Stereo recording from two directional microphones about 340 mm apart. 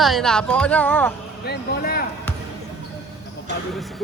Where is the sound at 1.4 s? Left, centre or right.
Left.